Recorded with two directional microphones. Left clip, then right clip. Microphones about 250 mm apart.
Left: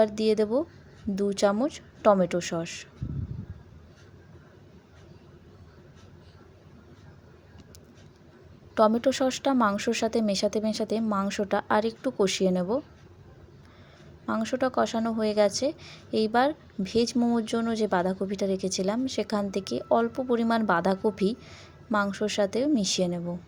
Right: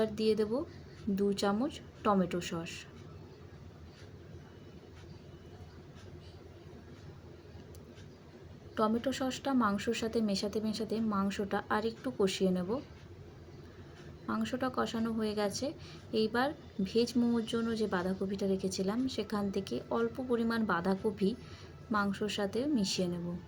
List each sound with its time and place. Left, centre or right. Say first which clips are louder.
0.0 s a woman's voice: left 8 dB; left
8.7 s a woman's voice: left 10 dB; left
14.3 s a woman's voice: left 8 dB; left